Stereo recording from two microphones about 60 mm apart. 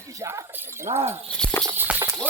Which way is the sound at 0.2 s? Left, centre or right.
Right.